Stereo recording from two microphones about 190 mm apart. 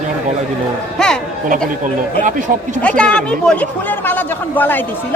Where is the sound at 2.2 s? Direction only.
40° right (ahead or behind).